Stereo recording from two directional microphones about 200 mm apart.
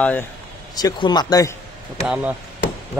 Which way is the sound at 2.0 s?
5° right (ahead or behind).